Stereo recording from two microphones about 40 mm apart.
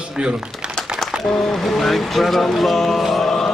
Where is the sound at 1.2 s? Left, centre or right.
Centre.